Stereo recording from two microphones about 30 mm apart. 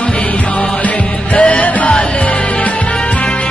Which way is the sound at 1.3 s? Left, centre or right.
Left.